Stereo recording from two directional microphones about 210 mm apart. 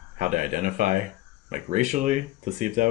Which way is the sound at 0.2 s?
35° right (ahead or behind).